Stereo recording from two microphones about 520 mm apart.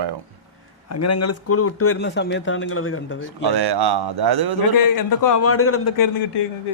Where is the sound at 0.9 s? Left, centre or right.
Left.